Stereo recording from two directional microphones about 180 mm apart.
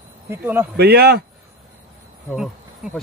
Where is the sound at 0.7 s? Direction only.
65° right (ahead or behind).